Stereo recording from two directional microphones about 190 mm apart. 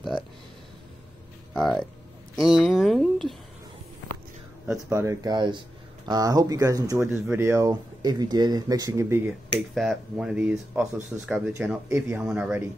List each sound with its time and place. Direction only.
1.5 s speech: centre (ahead or behind)
4.9 s speech: 20° right (ahead or behind)
9.8 s speech: 5° right (ahead or behind)